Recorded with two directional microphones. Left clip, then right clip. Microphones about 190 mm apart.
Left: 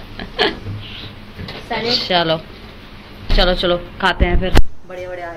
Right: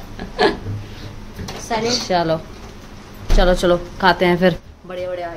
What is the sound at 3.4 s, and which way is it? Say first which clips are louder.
Speech: even; 30° right (ahead or behind).